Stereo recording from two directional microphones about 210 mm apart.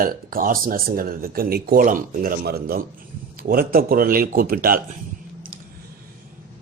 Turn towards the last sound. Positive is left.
turn(degrees=-45)  # may be behind; listen again after turning